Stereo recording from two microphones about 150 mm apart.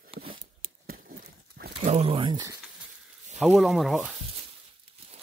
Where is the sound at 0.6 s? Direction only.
75° right (ahead or behind).